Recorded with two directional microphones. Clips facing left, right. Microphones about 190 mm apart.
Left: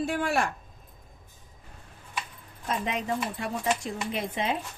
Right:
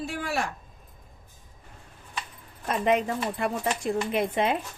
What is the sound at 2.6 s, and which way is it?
Speech, 55° right (ahead or behind).